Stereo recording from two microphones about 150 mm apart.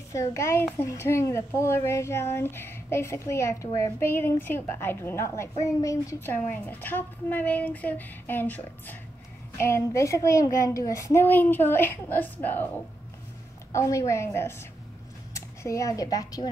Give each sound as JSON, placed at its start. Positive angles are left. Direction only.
{"t": 0.1, "sound": "a woman's voice", "side_deg": 20}
{"t": 13.7, "sound": "a woman's voice", "side_deg": 20}